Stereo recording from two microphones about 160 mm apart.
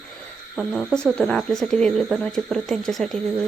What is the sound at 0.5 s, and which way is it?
Speech, centre (ahead or behind).